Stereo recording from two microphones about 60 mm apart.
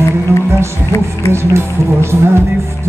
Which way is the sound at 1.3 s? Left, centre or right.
Right.